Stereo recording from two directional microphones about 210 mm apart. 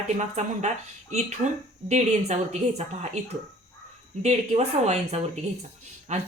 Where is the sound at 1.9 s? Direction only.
30° right (ahead or behind).